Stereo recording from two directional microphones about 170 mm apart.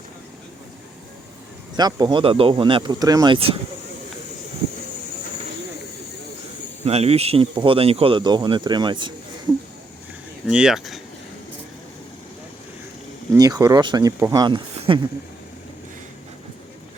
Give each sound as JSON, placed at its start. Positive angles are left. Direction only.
{"t": 1.7, "sound": "speech", "side_deg": -25}
{"t": 6.8, "sound": "speech", "side_deg": -35}
{"t": 10.4, "sound": "speech", "side_deg": -5}
{"t": 13.3, "sound": "speech", "side_deg": -20}
{"t": 14.8, "sound": "a sound", "side_deg": -30}